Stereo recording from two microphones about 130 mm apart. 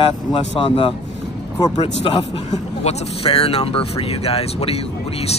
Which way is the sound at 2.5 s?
55° left (ahead or behind).